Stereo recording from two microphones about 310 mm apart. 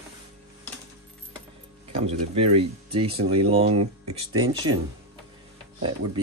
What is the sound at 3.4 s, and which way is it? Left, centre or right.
Speech, centre.